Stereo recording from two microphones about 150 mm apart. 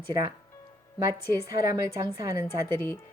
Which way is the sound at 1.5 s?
25° right (ahead or behind).